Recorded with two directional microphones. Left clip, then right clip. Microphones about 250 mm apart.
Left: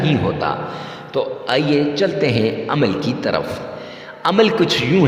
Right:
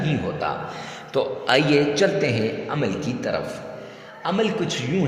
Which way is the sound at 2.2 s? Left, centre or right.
Centre.